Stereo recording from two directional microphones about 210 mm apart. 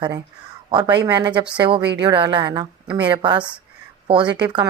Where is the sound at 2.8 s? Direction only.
5° right (ahead or behind).